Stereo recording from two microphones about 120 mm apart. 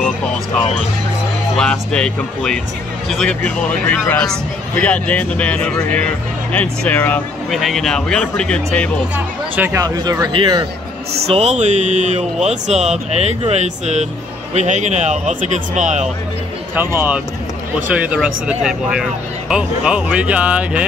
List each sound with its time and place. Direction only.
1.6 s speech: 5° left (ahead or behind)
3.4 s speech: 15° left (ahead or behind)
7.5 s speech: centre (ahead or behind)
9.1 s speech: 15° right (ahead or behind)
9.8 s a man's voice: 35° right (ahead or behind)
11.2 s speech: 60° right (ahead or behind)
14.5 s speech: 80° right
16.7 s speech: 15° right (ahead or behind)